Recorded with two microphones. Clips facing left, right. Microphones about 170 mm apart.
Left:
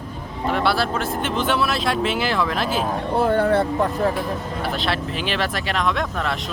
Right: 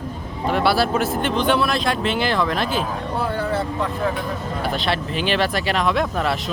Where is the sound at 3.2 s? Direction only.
50° left (ahead or behind).